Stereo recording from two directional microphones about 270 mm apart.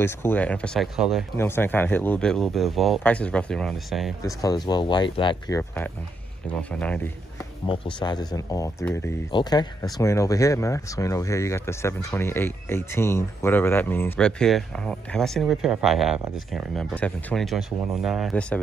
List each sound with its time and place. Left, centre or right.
0.0 s speech: centre
4.2 s speech: centre
7.6 s speech: centre